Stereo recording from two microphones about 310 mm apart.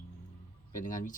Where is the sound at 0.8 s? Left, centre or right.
Left.